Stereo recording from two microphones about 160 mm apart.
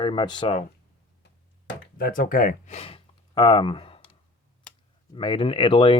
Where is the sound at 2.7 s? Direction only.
40° left (ahead or behind).